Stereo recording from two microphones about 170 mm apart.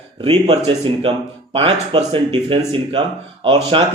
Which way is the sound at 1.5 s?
35° right (ahead or behind).